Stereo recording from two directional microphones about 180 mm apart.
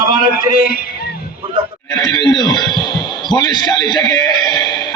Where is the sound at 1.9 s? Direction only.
25° left (ahead or behind).